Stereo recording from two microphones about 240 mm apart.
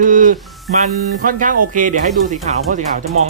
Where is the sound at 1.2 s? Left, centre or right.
Right.